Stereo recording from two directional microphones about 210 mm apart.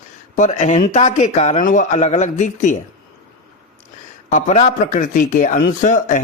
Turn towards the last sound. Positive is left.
turn(degrees=40)  # may be behind; listen again after turning